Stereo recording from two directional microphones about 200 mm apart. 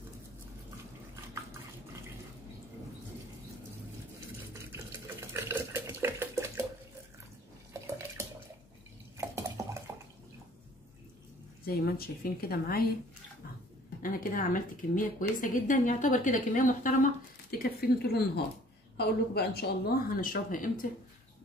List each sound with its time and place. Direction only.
4.7 s water tap: 10° right (ahead or behind)
7.8 s a sound: 15° right (ahead or behind)
9.2 s dishes: 15° right (ahead or behind)
11.6 s speech: 50° left (ahead or behind)
14.0 s speech: 45° left (ahead or behind)